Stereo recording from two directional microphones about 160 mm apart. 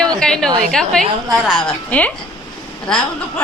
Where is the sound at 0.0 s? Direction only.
5° left (ahead or behind).